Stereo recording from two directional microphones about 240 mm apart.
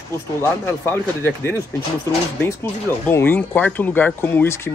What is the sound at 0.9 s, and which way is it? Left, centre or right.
Speech, centre.